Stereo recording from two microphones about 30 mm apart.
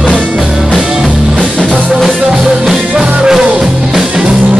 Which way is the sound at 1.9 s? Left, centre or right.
Centre.